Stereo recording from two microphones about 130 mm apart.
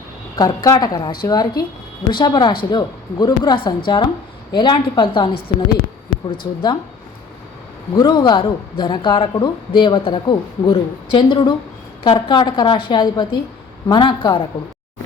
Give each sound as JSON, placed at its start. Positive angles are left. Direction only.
{"t": 0.3, "sound": "a woman's voice", "side_deg": 30}
{"t": 7.9, "sound": "speech", "side_deg": 35}